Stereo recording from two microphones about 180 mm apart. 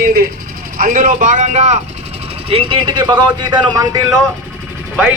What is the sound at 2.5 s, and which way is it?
Speech, 30° right (ahead or behind).